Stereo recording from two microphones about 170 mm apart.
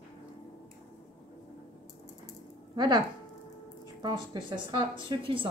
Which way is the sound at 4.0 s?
25° right (ahead or behind).